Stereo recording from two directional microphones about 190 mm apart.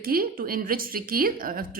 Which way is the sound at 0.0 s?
50° right (ahead or behind).